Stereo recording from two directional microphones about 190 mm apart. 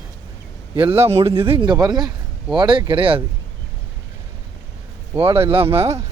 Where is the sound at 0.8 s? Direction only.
30° right (ahead or behind).